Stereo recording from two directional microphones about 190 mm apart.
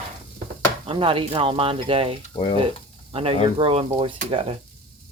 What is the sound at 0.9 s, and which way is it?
Speech, 30° right (ahead or behind).